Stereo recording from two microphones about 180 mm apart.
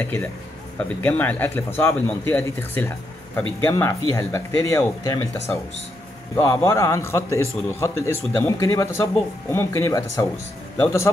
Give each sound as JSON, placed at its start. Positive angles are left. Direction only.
{"t": 0.0, "sound": "a man's voice", "side_deg": 10}